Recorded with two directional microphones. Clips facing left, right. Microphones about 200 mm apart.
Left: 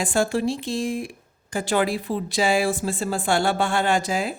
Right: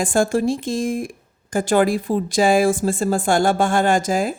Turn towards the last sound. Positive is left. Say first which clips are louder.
# right 4 dB
turn(degrees=-45)  # may be behind; listen again after turning